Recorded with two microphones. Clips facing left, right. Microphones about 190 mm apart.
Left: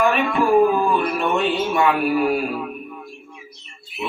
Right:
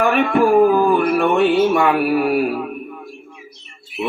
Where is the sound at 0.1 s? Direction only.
55° right (ahead or behind).